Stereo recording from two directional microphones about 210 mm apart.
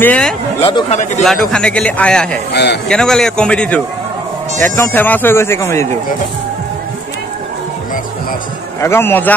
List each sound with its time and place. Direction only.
0.0 s speech: 5° left (ahead or behind)
0.6 s speech: 25° left (ahead or behind)
1.2 s a man's voice: centre (ahead or behind)
2.5 s speech: 55° left (ahead or behind)
2.9 s a man's voice: 5° left (ahead or behind)
8.8 s speech: 10° left (ahead or behind)